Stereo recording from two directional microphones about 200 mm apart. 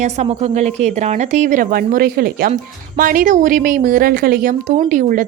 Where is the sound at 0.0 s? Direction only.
30° right (ahead or behind).